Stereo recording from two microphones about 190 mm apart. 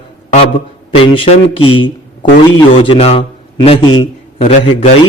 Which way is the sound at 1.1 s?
30° left (ahead or behind).